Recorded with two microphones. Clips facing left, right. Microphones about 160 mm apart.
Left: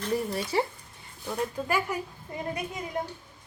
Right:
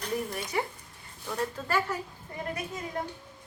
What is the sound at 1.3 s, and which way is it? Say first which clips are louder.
A woman's voice: left 1 dB; 15° left (ahead or behind).